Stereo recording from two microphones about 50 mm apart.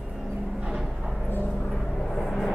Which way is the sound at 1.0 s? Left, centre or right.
Centre.